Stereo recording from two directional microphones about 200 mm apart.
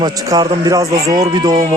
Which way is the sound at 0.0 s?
20° right (ahead or behind).